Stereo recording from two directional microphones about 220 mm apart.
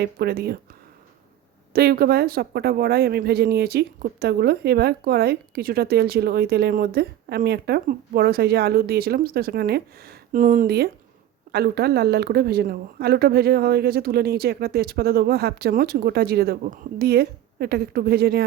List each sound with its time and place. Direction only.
0.0 s speech: 45° right (ahead or behind)
1.7 s speech: 45° right (ahead or behind)